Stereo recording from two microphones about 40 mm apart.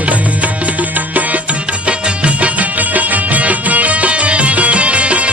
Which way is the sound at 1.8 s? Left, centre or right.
Right.